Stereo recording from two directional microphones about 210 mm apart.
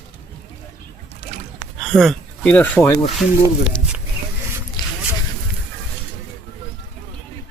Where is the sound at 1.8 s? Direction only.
Centre (ahead or behind).